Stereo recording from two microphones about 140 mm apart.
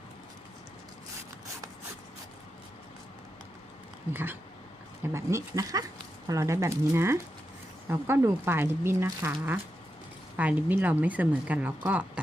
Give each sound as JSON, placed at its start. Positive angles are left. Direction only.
{"t": 4.1, "sound": "speech", "side_deg": -15}